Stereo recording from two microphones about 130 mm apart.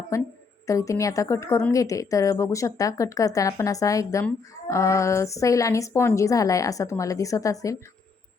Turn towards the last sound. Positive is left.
turn(degrees=25)  # may be behind; listen again after turning